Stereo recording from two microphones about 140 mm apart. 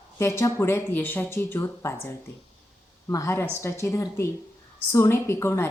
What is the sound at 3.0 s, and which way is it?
A woman's voice, 20° left (ahead or behind).